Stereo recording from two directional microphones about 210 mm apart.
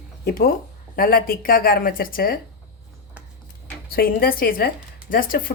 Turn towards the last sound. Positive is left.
turn(degrees=40)  # may be behind; listen again after turning